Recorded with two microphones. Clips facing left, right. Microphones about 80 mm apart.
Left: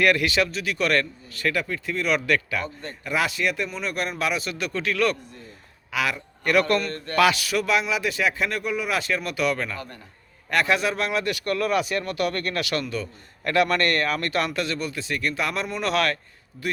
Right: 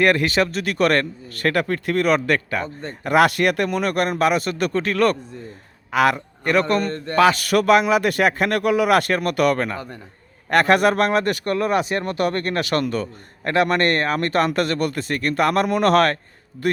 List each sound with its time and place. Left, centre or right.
0.0 s a man's voice: right
3.0 s speech: right
6.4 s a man's voice: right
7.3 s a man's voice: right